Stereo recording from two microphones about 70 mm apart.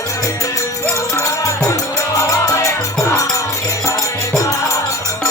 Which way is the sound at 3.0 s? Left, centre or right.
Left.